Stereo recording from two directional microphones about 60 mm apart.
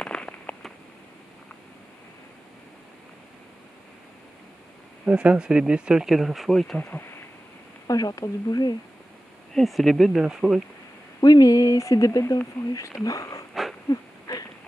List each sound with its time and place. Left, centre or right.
0.0 s a sound: centre
5.0 s speech: centre
7.8 s speech: left
9.5 s speech: centre
10.2 s speech: centre
11.1 s speech: left
13.8 s wheeze: left